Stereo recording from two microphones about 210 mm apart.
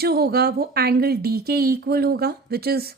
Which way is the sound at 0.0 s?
50° right (ahead or behind).